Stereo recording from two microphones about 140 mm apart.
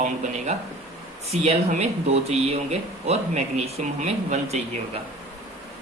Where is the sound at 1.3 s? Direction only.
50° right (ahead or behind).